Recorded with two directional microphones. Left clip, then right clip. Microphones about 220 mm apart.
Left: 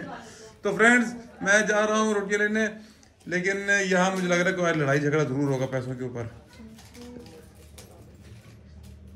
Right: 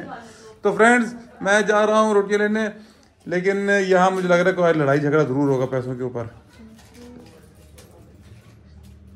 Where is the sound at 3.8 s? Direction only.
5° left (ahead or behind).